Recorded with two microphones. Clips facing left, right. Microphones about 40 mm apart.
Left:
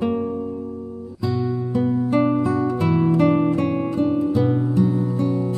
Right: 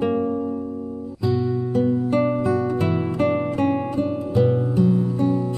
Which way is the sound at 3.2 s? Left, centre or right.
Centre.